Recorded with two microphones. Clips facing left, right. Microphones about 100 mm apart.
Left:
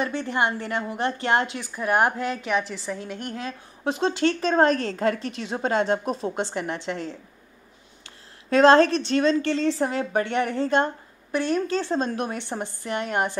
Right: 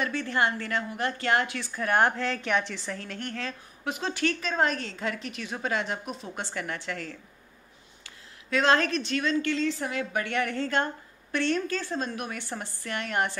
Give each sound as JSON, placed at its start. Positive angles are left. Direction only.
{"t": 0.0, "sound": "a woman's voice", "side_deg": 20}
{"t": 1.6, "sound": "a woman's voice", "side_deg": 10}
{"t": 3.8, "sound": "a woman's voice", "side_deg": 30}
{"t": 6.3, "sound": "a woman's voice", "side_deg": 25}
{"t": 8.5, "sound": "a woman's voice", "side_deg": 35}
{"t": 11.6, "sound": "a woman's voice", "side_deg": 25}
{"t": 12.4, "sound": "a woman's voice", "side_deg": 20}